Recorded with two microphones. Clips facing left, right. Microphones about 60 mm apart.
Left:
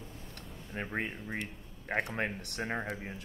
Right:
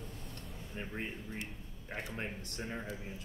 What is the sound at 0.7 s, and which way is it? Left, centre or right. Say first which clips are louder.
Speech: left 6 dB; left.